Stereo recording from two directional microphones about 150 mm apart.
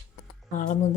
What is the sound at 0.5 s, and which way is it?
Speech, 60° left (ahead or behind).